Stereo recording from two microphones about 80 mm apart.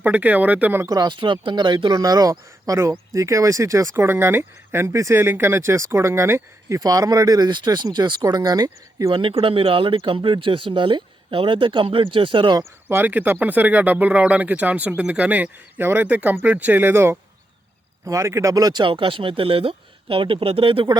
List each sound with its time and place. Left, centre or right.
0.0 s speech: centre
0.9 s speech: right
2.0 s speech: right
6.7 s speech: right
9.1 s speech: right
12.9 s speech: right
20.7 s speech: right